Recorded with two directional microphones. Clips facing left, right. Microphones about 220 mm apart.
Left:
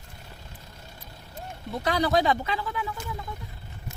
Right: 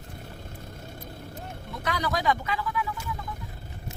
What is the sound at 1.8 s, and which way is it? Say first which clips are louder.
A child's voice: left 5 dB; 30° left (ahead or behind).